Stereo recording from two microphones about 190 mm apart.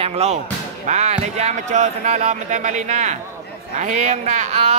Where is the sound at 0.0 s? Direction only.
35° right (ahead or behind).